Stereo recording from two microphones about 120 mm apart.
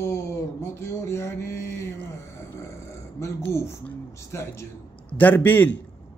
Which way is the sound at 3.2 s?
25° left (ahead or behind).